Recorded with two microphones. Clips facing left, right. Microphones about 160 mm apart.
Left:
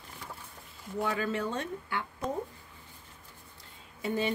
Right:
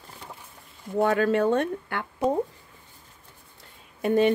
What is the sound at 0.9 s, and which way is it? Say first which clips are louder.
Speech: right 10 dB; 65° right (ahead or behind).